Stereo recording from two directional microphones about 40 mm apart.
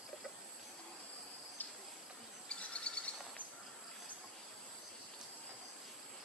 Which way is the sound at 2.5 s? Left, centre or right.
Left.